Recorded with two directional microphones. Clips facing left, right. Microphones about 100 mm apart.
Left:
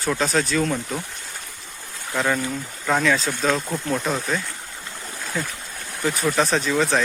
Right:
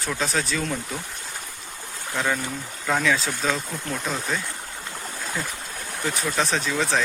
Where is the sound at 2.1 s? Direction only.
Centre (ahead or behind).